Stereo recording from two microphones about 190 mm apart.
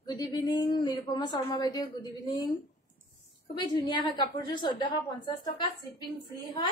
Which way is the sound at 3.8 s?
25° left (ahead or behind).